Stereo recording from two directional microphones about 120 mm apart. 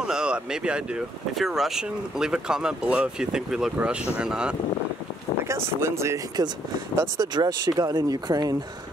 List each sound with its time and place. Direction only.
0.0 s speech: 5° right (ahead or behind)
5.4 s speech: 20° right (ahead or behind)